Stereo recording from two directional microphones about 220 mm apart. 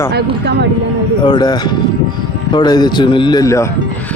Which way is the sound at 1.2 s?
20° left (ahead or behind).